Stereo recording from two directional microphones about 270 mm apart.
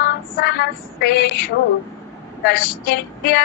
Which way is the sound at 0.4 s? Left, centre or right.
Left.